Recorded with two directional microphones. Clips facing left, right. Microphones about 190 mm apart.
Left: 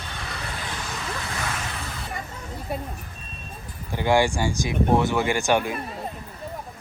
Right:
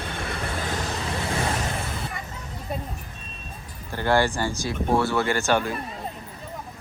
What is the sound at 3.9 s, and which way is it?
Speech, 15° left (ahead or behind).